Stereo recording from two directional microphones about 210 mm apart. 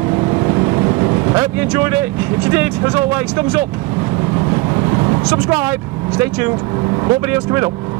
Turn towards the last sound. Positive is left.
turn(degrees=-10)  # may be behind; listen again after turning